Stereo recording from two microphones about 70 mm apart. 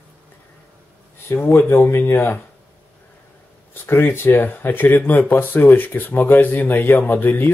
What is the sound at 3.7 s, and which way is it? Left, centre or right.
Speech, left.